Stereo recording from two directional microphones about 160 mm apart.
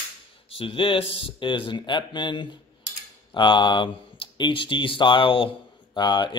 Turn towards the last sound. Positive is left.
turn(degrees=30)  # may be behind; listen again after turning